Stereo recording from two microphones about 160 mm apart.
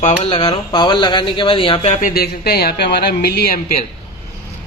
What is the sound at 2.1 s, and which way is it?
Speech, 75° left (ahead or behind).